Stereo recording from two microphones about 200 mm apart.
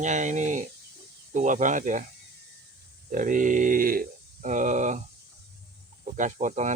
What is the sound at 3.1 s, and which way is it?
Speech, 40° right (ahead or behind).